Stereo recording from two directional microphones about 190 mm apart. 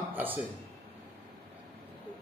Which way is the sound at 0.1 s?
10° right (ahead or behind).